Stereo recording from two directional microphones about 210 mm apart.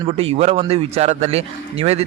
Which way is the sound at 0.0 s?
30° right (ahead or behind).